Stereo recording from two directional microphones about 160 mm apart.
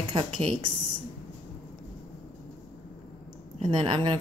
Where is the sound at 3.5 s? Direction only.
30° right (ahead or behind).